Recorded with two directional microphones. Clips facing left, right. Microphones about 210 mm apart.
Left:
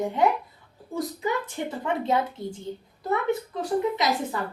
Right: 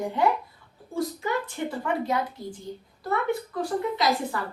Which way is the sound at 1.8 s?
25° left (ahead or behind).